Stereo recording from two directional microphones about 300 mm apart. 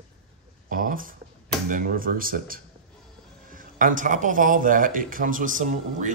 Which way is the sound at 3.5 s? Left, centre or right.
Right.